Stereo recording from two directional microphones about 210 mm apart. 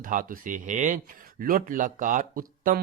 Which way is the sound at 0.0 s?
40° right (ahead or behind).